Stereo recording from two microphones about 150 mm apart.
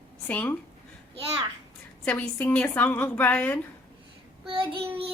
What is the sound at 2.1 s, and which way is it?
A woman's voice, 10° left (ahead or behind).